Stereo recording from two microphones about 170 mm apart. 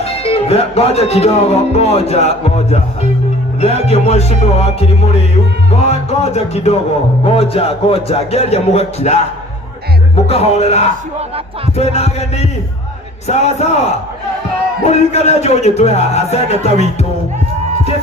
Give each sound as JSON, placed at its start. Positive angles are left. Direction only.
{"t": 0.2, "sound": "music", "side_deg": 35}
{"t": 10.2, "sound": "music", "side_deg": 35}
{"t": 13.2, "sound": "music", "side_deg": 40}
{"t": 14.8, "sound": "music", "side_deg": 40}